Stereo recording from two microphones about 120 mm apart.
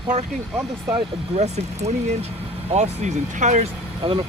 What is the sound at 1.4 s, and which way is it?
Speech, 65° right (ahead or behind).